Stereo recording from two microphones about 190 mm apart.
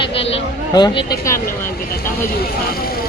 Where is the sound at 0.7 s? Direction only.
20° left (ahead or behind).